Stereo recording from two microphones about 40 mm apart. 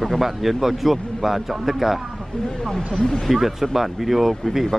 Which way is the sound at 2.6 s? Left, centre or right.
Centre.